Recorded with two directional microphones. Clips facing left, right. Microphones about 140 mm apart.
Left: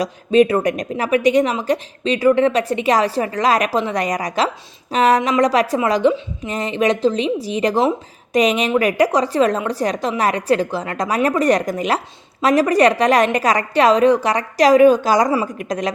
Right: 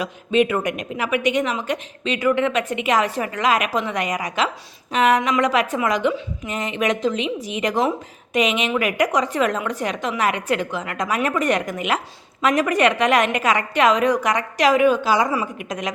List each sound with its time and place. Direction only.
0.0 s a woman's voice: 35° left (ahead or behind)